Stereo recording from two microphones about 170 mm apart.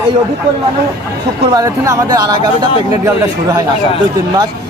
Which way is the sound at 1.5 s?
20° right (ahead or behind).